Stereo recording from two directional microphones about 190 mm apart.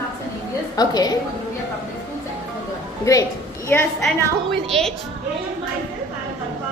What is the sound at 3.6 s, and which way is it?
Speech, 10° left (ahead or behind).